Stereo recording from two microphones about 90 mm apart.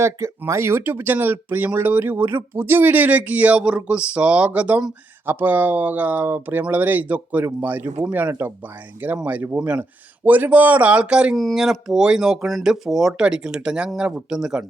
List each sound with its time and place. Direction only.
0.0 s speech: 30° right (ahead or behind); by 11.3 s 10° right (ahead or behind)
11.3 s speech: centre (ahead or behind)